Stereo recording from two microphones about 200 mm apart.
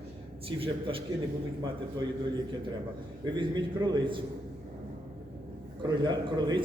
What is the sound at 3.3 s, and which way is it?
Speech, 20° right (ahead or behind).